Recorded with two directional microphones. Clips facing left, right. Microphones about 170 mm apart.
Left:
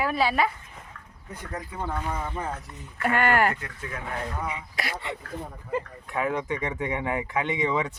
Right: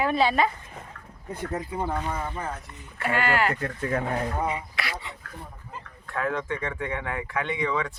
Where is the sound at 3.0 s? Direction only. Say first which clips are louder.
Left 2 dB; 55° left (ahead or behind).